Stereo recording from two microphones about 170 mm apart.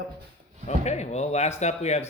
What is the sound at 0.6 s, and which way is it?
Speech, 40° left (ahead or behind).